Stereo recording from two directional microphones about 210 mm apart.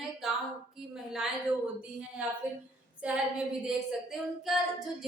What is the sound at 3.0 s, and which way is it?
A woman's voice, 5° right (ahead or behind).